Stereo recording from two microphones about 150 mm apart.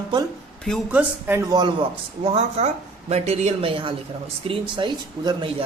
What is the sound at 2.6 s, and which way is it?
Speech, 45° right (ahead or behind).